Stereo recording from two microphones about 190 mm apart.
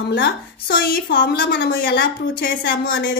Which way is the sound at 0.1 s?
65° left (ahead or behind).